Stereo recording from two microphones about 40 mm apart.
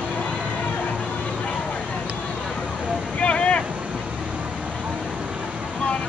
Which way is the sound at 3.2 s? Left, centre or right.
Left.